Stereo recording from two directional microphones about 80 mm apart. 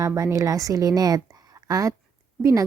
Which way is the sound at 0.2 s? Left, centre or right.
Right.